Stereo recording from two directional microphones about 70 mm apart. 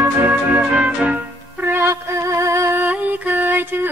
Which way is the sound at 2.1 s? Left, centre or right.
Right.